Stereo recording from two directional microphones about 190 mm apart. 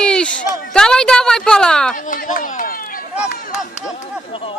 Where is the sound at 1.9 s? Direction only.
45° left (ahead or behind).